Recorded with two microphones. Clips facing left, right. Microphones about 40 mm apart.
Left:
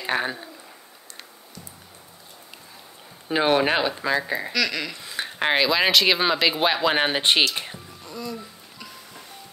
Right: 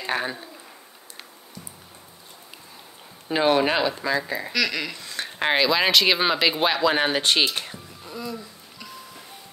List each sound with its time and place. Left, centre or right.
0.0 s speech: centre
3.3 s speech: centre
4.5 s speech: centre
4.9 s a sound: centre
5.5 s speech: centre
6.8 s speech: centre
8.0 s speech: centre